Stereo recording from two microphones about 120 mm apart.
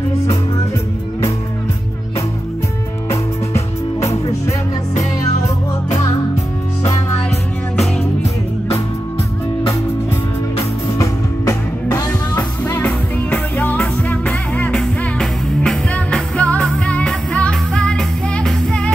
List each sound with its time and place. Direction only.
3.1 s music: 25° left (ahead or behind)
5.9 s music: 30° left (ahead or behind)
8.0 s music: 60° left (ahead or behind)
11.0 s music: 30° left (ahead or behind)
12.4 s music: 20° left (ahead or behind)